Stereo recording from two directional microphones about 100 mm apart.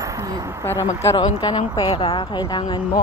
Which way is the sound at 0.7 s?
30° left (ahead or behind).